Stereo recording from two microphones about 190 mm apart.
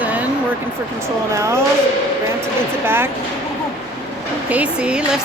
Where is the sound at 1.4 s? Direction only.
15° right (ahead or behind).